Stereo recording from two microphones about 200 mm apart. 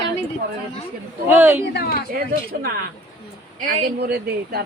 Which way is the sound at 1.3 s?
10° right (ahead or behind).